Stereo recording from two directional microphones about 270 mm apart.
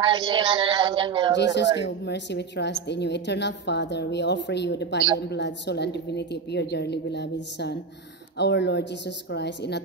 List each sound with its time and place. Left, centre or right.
0.0 s a woman's voice: centre
1.3 s a woman's voice: left
8.4 s a woman's voice: left